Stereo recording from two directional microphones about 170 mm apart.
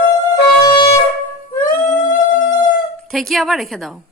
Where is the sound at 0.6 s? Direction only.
30° left (ahead or behind).